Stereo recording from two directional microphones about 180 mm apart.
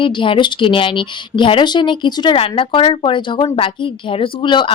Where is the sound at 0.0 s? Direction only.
30° left (ahead or behind).